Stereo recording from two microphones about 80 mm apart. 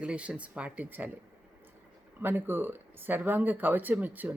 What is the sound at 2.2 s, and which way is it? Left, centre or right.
Speech, right.